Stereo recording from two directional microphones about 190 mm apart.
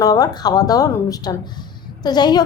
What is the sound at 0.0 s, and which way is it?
A woman's voice, 20° left (ahead or behind).